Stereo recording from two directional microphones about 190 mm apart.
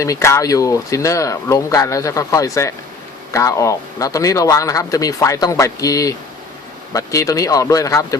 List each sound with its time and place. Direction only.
0.0 s speech: 15° left (ahead or behind)